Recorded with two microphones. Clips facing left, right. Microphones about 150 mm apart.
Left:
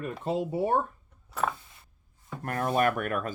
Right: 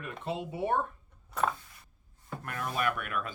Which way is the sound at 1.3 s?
Centre (ahead or behind).